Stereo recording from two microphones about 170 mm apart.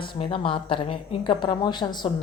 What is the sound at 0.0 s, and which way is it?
Speech, 30° left (ahead or behind).